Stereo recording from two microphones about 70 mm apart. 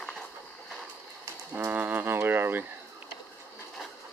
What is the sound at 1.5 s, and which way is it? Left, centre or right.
Music, right.